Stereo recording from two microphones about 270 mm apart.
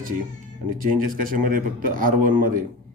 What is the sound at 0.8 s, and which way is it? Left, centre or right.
A man's voice, right.